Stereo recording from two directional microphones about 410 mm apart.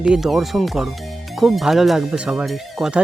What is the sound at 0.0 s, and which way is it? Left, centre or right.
Speech, centre.